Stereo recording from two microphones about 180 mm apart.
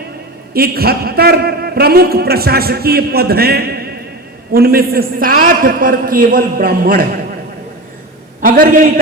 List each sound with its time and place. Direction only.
0.5 s a man's voice: 55° right (ahead or behind)
8.4 s a man's voice: 50° right (ahead or behind)